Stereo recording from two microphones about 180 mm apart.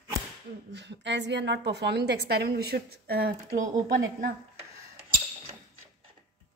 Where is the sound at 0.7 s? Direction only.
75° right (ahead or behind).